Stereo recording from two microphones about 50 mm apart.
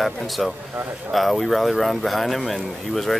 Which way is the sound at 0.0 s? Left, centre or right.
Centre.